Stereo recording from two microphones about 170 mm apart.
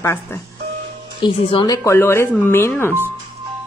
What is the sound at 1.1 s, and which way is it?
Speech, 25° left (ahead or behind).